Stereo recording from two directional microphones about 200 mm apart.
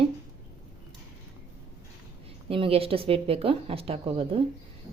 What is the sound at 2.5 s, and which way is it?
Speech, 30° right (ahead or behind).